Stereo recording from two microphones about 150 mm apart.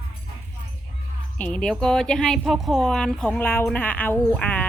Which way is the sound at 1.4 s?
5° left (ahead or behind).